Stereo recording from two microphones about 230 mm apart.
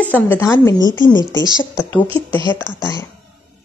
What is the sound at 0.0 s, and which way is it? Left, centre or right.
Speech, centre.